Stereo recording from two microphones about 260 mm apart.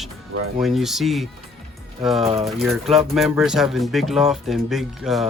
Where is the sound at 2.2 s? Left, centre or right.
Right.